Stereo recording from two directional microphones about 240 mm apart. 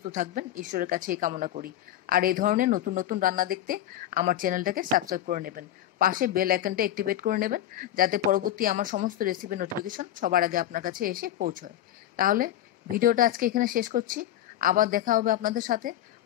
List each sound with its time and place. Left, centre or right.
0.0 s speech: right